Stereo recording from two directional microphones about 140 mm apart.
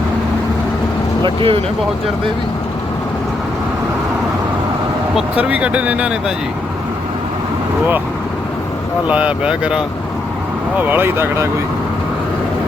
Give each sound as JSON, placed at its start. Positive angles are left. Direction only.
{"t": 1.2, "sound": "speech", "side_deg": -40}
{"t": 5.1, "sound": "speech", "side_deg": -10}
{"t": 9.0, "sound": "speech", "side_deg": -10}